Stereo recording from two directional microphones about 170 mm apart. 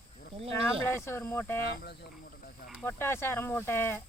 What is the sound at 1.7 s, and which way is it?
Speech, 70° left (ahead or behind).